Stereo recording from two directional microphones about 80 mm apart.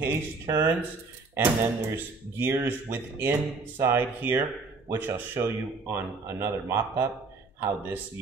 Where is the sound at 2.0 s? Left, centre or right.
Right.